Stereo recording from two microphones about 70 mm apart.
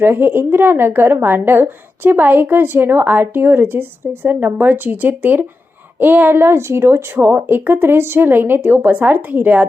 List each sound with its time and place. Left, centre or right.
0.0 s a woman's voice: right